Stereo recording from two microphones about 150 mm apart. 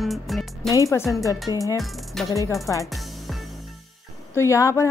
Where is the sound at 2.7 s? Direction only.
20° left (ahead or behind).